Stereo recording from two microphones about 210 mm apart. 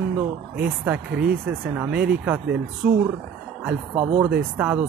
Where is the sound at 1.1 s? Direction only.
50° right (ahead or behind).